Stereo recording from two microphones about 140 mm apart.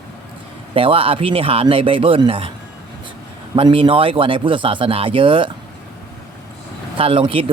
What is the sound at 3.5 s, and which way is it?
Speech, 40° right (ahead or behind).